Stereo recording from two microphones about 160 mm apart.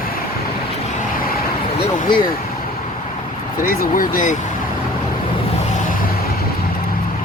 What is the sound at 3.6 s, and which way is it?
Speech, 60° left (ahead or behind).